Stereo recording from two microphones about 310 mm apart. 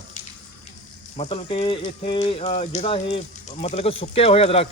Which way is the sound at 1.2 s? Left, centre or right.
Centre.